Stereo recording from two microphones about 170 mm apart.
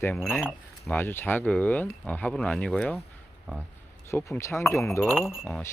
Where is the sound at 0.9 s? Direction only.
15° left (ahead or behind).